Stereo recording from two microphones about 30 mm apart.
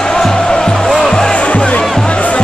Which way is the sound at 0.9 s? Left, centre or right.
Left.